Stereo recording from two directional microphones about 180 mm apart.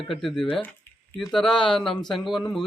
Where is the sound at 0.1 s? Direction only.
Centre (ahead or behind).